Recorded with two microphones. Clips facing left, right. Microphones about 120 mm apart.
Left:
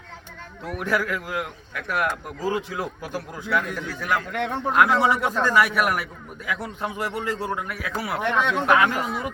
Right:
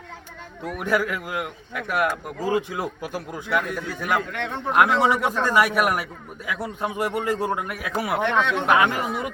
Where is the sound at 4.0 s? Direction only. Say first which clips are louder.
Even; 15° right (ahead or behind).